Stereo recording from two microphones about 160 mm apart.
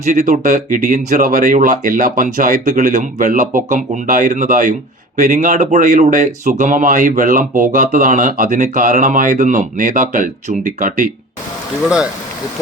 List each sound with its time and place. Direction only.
0.0 s speech: 50° right (ahead or behind)